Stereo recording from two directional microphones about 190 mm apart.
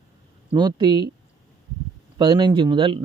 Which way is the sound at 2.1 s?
25° right (ahead or behind).